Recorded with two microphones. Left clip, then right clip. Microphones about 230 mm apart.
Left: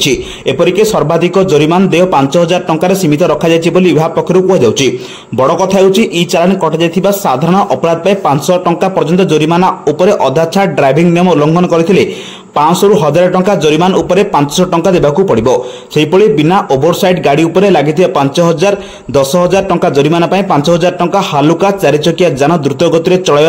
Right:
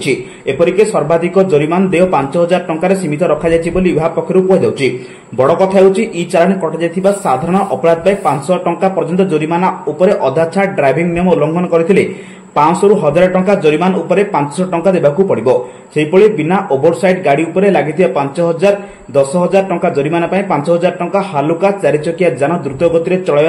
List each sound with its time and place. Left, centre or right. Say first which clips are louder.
0.0 s speech: left 4 dB; left
13.1 s speech: left 2 dB; left